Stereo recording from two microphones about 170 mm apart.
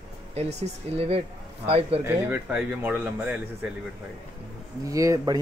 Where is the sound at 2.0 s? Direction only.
15° right (ahead or behind).